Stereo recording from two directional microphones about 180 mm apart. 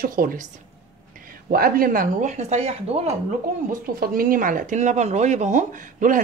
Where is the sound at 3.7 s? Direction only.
50° right (ahead or behind).